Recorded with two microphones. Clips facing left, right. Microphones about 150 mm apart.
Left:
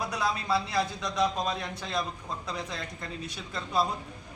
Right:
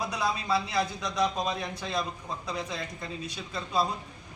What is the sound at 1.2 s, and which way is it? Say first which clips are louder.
A man's voice: even; 15° right (ahead or behind).